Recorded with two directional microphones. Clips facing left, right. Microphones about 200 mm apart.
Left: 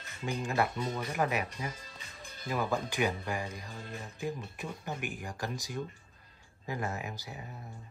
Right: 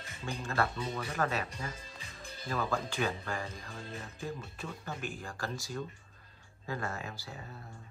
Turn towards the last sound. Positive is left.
turn(degrees=15)  # may be behind; listen again after turning